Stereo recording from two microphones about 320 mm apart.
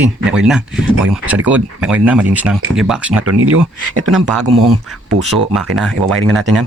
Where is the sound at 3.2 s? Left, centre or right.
Right.